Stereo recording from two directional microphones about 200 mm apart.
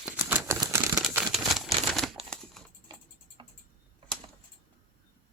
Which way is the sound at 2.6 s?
Centre (ahead or behind).